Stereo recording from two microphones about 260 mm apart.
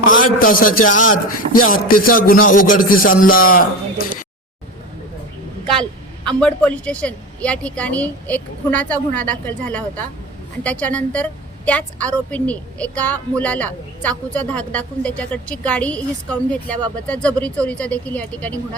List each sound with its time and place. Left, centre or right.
0.1 s a man's voice: left
6.2 s a woman's voice: centre